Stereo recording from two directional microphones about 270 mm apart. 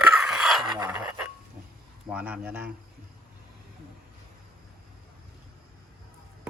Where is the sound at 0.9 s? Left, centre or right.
Centre.